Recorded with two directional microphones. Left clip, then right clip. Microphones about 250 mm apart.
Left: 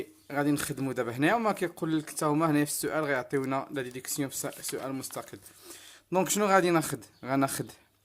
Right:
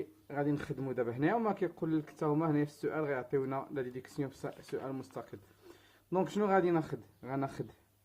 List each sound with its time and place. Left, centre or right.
0.3 s speech: left